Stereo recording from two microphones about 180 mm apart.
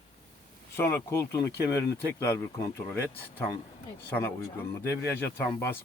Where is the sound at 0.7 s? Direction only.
15° left (ahead or behind).